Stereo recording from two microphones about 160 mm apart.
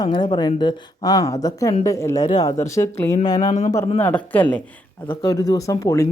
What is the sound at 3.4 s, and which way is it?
Speech, 45° left (ahead or behind).